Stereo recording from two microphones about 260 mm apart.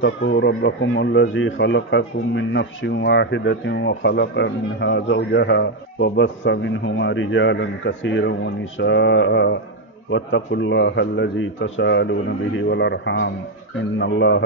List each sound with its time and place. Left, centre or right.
0.0 s speech: left